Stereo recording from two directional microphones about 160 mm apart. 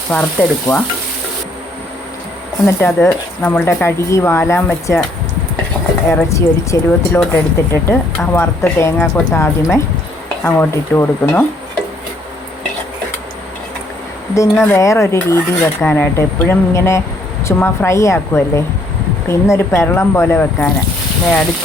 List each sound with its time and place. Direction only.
0.1 s a woman's voice: 10° left (ahead or behind)
2.6 s a woman's voice: 15° left (ahead or behind)
6.1 s a woman's voice: 20° left (ahead or behind)
14.5 s a woman's voice: 15° left (ahead or behind)